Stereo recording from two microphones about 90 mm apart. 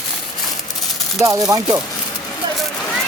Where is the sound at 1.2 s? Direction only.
40° right (ahead or behind).